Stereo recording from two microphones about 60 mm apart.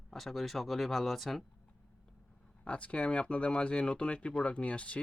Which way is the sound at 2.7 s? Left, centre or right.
Left.